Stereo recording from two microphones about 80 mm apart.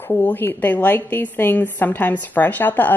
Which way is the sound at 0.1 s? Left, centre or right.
Left.